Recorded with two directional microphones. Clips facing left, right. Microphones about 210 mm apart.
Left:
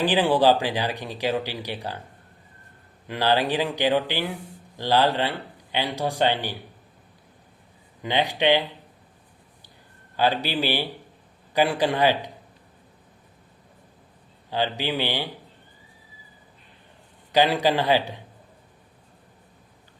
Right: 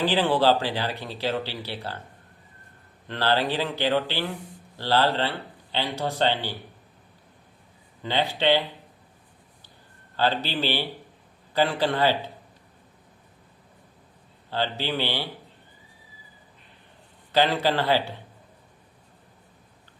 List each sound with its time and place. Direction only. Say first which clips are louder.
0.0 s speech: left 2 dB; 15° left (ahead or behind)
3.1 s speech: left 2 dB; 15° left (ahead or behind)
8.0 s speech: left 2 dB; 15° left (ahead or behind)
10.2 s speech: left 2 dB; 15° left (ahead or behind)
14.5 s speech: left 2 dB; 15° left (ahead or behind)
17.3 s speech: left 2 dB; 15° left (ahead or behind)